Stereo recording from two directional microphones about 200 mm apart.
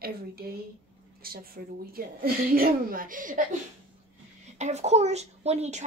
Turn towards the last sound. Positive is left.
turn(degrees=-35)  # may be behind; listen again after turning